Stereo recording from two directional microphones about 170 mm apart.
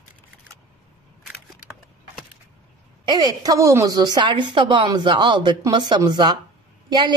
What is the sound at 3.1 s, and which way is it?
A woman's voice, 25° right (ahead or behind).